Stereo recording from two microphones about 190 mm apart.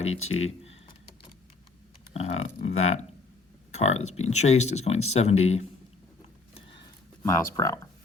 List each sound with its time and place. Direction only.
0.0 s speech: 90° left
0.4 s computer keyboard: 35° left (ahead or behind)
2.1 s speech: 35° left (ahead or behind)
2.8 s speech: 90° left
3.7 s speech: 35° left (ahead or behind)
6.5 s a sound: 25° left (ahead or behind)
7.2 s speech: 15° left (ahead or behind)